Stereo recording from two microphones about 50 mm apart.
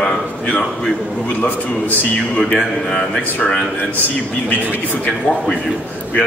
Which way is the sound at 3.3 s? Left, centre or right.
Left.